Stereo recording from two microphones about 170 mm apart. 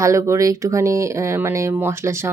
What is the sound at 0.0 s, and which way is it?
Speech, 15° right (ahead or behind).